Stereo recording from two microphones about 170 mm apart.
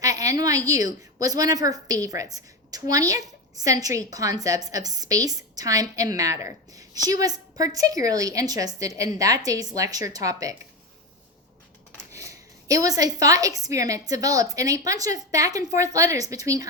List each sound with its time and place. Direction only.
0.0 s a sound: 20° right (ahead or behind)
0.9 s a woman's voice: 20° right (ahead or behind)
12.1 s a woman's voice: 20° right (ahead or behind)